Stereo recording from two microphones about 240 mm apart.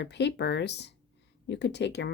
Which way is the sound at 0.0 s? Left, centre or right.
Left.